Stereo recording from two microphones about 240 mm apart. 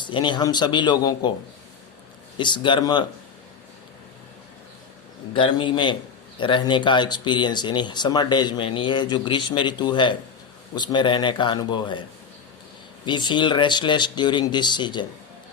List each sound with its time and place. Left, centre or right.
0.0 s a man's voice: centre
2.4 s a man's voice: centre
5.3 s a man's voice: left
13.1 s a man's voice: centre